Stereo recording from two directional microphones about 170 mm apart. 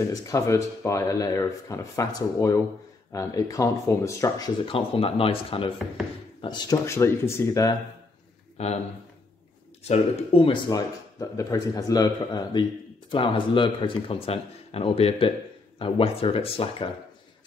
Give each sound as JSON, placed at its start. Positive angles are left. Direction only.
{"t": 0.1, "sound": "speech", "side_deg": 20}
{"t": 4.6, "sound": "speech", "side_deg": 35}
{"t": 8.6, "sound": "speech", "side_deg": 40}
{"t": 9.8, "sound": "speech", "side_deg": 35}